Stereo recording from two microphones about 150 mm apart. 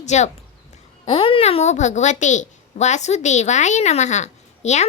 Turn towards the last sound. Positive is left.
turn(degrees=50)  # may be behind; listen again after turning